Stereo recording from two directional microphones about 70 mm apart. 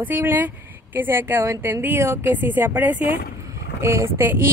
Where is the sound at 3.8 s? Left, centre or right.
Right.